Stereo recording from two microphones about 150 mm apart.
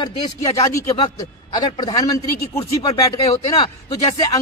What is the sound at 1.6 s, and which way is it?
Speech, 30° left (ahead or behind).